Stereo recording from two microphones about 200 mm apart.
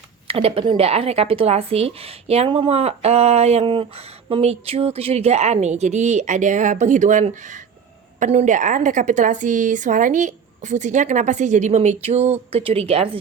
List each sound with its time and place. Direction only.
0.3 s speech: 30° right (ahead or behind)